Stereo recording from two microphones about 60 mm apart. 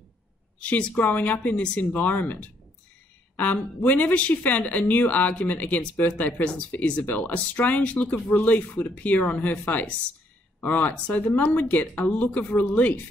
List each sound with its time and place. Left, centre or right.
0.6 s speech: left
3.8 s speech: left